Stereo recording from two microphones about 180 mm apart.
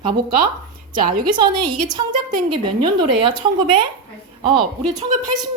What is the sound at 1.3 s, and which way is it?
A woman's voice, 25° right (ahead or behind).